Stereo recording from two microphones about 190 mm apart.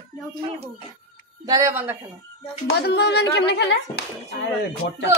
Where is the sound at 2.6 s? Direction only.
60° left (ahead or behind).